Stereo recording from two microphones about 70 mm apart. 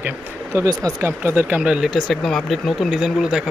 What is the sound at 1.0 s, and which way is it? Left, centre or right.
Speech, right.